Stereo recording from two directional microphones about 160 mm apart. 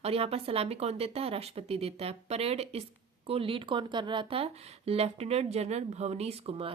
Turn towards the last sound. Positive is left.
turn(degrees=-35)  # may be behind; listen again after turning